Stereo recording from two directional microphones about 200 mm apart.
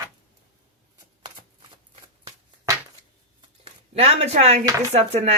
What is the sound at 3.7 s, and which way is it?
Speech, 30° right (ahead or behind).